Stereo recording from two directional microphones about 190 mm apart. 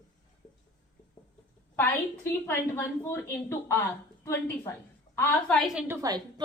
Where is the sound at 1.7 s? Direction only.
10° left (ahead or behind).